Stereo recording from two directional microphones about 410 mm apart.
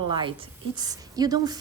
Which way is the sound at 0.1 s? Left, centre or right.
Centre.